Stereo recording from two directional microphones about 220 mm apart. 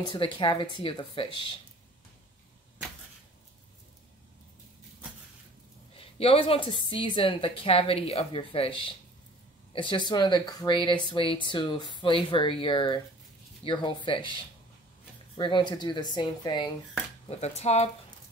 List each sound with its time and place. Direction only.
0.1 s speech: 25° left (ahead or behind)
5.9 s speech: 25° left (ahead or behind)